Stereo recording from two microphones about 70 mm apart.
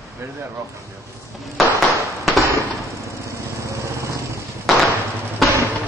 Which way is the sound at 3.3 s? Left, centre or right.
Right.